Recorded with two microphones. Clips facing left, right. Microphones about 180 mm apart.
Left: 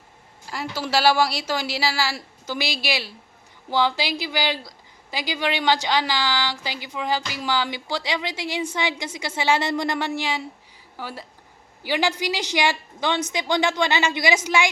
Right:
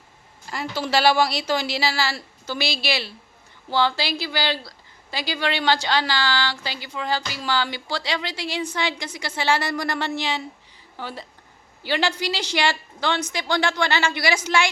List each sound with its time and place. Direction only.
0.4 s a woman's voice: 5° left (ahead or behind)